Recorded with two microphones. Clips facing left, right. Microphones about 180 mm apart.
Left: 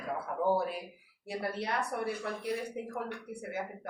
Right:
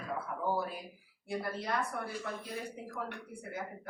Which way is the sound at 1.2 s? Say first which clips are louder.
Left 1 dB; 70° left (ahead or behind).